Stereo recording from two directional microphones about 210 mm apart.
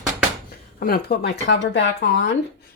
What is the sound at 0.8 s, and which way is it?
Speech, 45° left (ahead or behind).